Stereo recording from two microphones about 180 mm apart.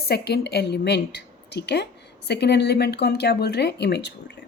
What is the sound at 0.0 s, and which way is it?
A woman's voice, 60° left (ahead or behind).